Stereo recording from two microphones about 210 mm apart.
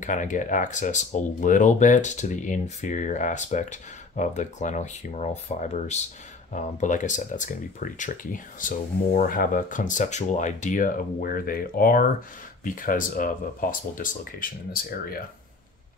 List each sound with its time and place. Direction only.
0.0 s speech: 35° left (ahead or behind)